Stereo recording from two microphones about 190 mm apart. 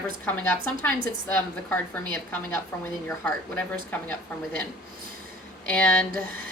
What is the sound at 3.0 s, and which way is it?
A woman's voice, 10° left (ahead or behind).